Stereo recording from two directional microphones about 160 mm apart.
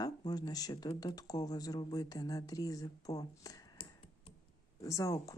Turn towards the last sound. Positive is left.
turn(degrees=20)  # may be behind; listen again after turning